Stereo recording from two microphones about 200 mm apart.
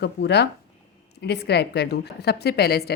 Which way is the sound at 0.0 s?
55° left (ahead or behind).